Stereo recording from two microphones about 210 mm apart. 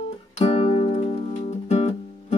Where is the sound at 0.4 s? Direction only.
30° left (ahead or behind).